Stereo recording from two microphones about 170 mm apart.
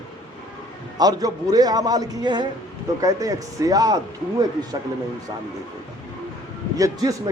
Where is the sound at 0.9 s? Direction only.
20° right (ahead or behind).